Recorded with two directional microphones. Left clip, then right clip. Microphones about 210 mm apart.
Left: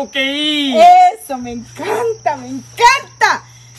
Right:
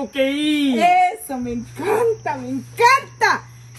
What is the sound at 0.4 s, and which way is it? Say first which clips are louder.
Speech: left 11 dB; 10° left (ahead or behind).